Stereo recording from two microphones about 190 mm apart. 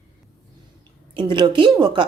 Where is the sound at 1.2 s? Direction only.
25° right (ahead or behind).